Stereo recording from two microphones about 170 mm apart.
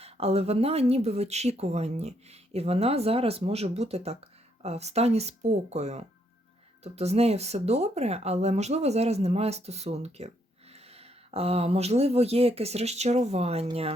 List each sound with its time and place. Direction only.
0.0 s speech: 35° right (ahead or behind)